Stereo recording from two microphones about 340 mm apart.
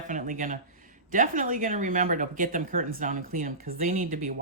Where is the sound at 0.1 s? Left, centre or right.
Right.